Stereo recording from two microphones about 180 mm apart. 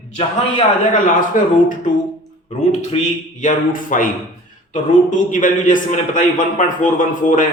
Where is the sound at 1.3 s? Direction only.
45° left (ahead or behind).